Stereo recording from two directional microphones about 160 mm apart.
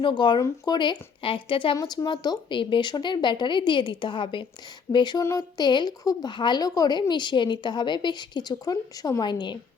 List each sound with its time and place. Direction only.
0.0 s speech: 30° left (ahead or behind)
1.7 s speech: 20° left (ahead or behind)